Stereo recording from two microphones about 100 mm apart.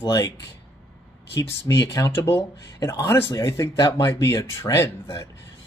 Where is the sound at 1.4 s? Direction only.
30° left (ahead or behind).